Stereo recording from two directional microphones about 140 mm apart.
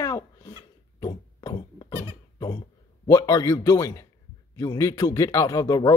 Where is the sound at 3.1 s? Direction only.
25° left (ahead or behind).